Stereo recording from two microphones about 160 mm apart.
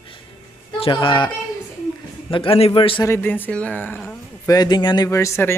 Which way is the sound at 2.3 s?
35° left (ahead or behind).